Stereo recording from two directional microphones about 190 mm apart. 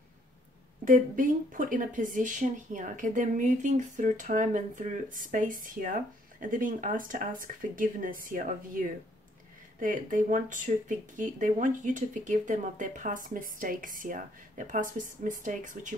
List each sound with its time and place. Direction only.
0.8 s speech: 45° right (ahead or behind)